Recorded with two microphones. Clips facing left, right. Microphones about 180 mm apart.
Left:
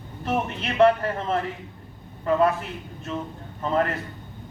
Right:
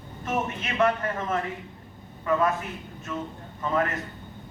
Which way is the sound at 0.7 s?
35° left (ahead or behind).